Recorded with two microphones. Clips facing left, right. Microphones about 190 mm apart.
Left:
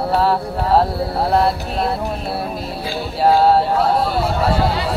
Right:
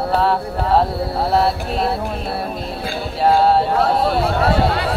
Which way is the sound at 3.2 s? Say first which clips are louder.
Left 1 dB; centre (ahead or behind).